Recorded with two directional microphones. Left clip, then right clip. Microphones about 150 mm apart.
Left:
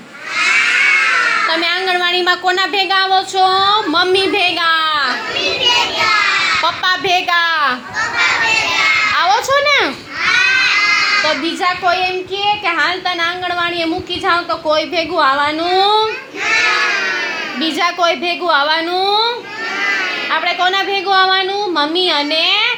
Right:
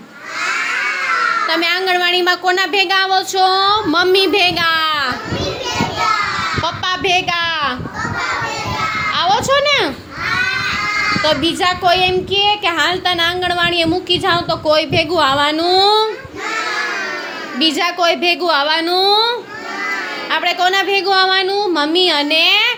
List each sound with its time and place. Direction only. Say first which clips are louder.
1.5 s a woman's voice: even; 40° right (ahead or behind)
6.6 s speech: left 3 dB; 20° right (ahead or behind)
9.1 s a sound: left 1 dB; 25° right (ahead or behind)
11.2 s speech: right 1 dB; 50° right (ahead or behind)
17.6 s a woman's voice: right 1 dB; 30° right (ahead or behind)
18.9 s a child's voice: right 3 dB; 50° right (ahead or behind)
20.3 s a woman's voice: right 1 dB; 40° right (ahead or behind)